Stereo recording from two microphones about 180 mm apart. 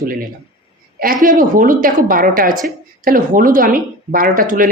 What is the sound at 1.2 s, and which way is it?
Speech, 50° right (ahead or behind).